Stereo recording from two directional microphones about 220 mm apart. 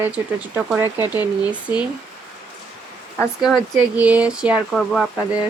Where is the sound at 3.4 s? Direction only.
Centre (ahead or behind).